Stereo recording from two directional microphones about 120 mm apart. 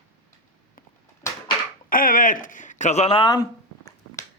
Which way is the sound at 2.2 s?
90° left.